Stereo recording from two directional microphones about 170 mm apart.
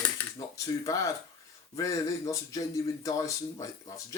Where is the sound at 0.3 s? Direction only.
20° left (ahead or behind).